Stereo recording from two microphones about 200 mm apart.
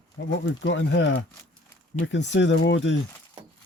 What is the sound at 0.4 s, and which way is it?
Speech, 65° left (ahead or behind).